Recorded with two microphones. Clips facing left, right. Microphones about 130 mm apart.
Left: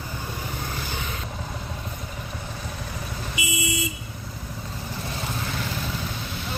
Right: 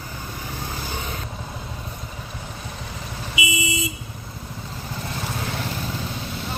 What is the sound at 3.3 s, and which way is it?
Vehicle, 90° right.